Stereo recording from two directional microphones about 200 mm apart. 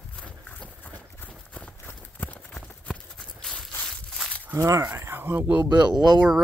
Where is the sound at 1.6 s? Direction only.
5° left (ahead or behind).